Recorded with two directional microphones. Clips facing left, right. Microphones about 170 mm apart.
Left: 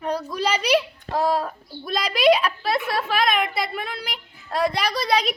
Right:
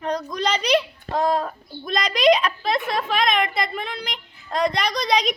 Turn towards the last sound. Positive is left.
turn(degrees=5)  # may be behind; listen again after turning